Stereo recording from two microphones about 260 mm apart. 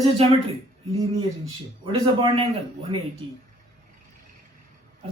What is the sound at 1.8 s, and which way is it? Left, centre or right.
Speech, centre.